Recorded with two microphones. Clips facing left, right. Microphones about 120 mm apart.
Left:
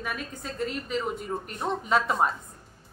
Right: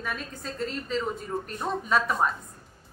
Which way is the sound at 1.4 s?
20° left (ahead or behind).